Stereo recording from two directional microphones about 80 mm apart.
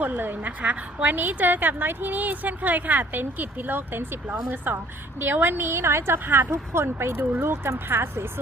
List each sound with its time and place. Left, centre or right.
0.0 s speech: right